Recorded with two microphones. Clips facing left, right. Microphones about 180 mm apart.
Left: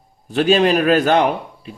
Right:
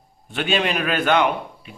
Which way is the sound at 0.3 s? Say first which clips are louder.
Left 8 dB; 40° left (ahead or behind).